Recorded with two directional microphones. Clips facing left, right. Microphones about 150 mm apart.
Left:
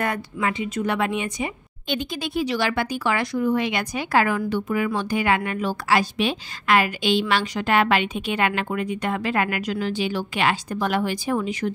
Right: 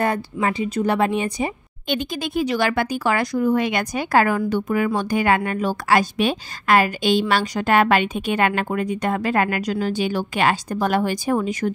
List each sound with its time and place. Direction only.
0.0 s speech: 35° right (ahead or behind)
1.9 s speech: 45° right (ahead or behind)